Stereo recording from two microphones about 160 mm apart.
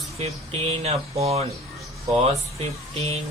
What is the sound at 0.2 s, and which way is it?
Speech, 40° right (ahead or behind).